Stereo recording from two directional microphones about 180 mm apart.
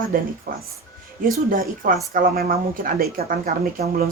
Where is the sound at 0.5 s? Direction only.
50° right (ahead or behind).